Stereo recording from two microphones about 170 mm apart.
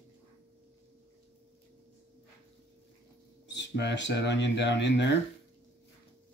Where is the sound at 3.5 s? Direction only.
90° left.